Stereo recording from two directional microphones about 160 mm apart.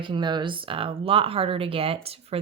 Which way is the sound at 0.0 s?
30° right (ahead or behind).